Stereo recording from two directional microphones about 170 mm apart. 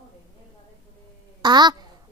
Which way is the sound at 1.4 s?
25° right (ahead or behind).